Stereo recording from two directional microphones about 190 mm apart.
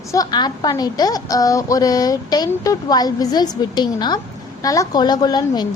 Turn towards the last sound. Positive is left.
turn(degrees=20)  # may be behind; listen again after turning